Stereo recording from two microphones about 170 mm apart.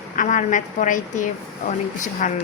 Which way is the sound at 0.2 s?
50° left (ahead or behind).